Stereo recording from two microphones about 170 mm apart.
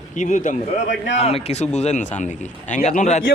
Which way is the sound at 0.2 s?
50° left (ahead or behind).